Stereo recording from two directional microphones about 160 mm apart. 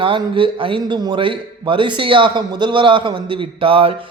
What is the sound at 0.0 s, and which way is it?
A man's voice, 35° right (ahead or behind).